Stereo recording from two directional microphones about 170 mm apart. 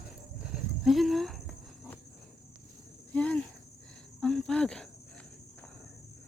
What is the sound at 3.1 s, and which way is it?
Cricket, 10° left (ahead or behind).